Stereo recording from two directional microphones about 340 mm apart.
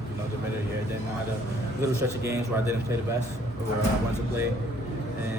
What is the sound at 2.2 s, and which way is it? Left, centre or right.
Speech, centre.